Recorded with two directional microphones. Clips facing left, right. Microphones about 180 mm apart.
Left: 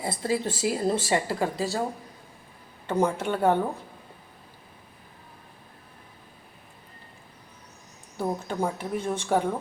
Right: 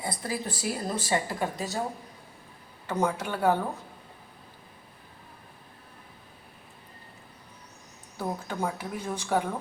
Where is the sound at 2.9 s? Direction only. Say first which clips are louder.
Left 4 dB; 25° left (ahead or behind).